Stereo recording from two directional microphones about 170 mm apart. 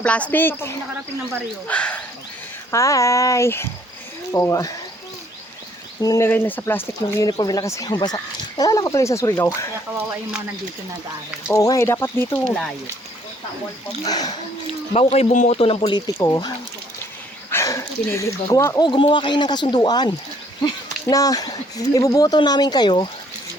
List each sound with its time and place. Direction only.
0.0 s speech: 10° left (ahead or behind)
2.7 s speech: 20° left (ahead or behind)
6.0 s speech: 20° left (ahead or behind)
7.3 s speech: 25° left (ahead or behind)
11.5 s speech: 20° left (ahead or behind)
14.1 s speech: 25° left (ahead or behind)
14.9 s a man's voice: 40° left (ahead or behind); by 16.5 s 20° left (ahead or behind)
17.5 s speech: 15° left (ahead or behind)
18.9 s speech: 30° left (ahead or behind)